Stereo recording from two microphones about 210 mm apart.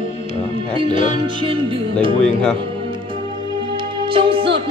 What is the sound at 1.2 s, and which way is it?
Music, 25° right (ahead or behind).